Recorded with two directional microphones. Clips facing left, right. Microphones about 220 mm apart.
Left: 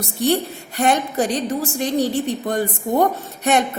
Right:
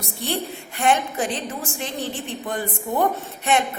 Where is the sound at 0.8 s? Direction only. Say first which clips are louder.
Left 3 dB; 40° left (ahead or behind).